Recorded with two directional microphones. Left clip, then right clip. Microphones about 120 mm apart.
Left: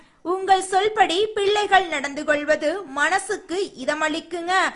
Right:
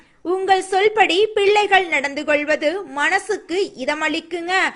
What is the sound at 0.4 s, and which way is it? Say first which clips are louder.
A woman's voice: right 2 dB; 15° right (ahead or behind).